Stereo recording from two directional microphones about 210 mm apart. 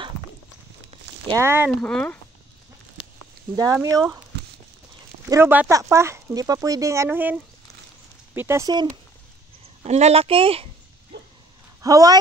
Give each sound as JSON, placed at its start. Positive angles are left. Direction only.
{"t": 1.2, "sound": "speech", "side_deg": -15}
{"t": 1.7, "sound": "speech", "side_deg": 5}
{"t": 3.0, "sound": "a sound", "side_deg": 25}
{"t": 3.8, "sound": "speech", "side_deg": -15}
{"t": 5.3, "sound": "speech", "side_deg": -10}
{"t": 9.8, "sound": "speech", "side_deg": -30}
{"t": 11.8, "sound": "speech", "side_deg": -15}